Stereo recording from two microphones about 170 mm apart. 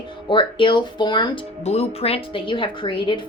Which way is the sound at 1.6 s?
40° left (ahead or behind).